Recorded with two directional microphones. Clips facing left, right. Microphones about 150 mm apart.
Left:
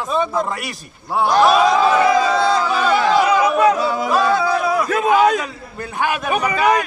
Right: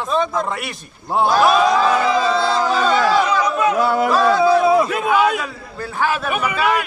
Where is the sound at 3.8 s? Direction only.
60° right (ahead or behind).